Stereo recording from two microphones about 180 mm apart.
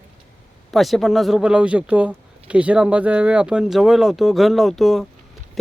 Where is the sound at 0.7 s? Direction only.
Centre (ahead or behind).